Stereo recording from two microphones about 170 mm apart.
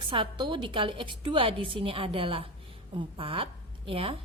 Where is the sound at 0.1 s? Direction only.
30° right (ahead or behind).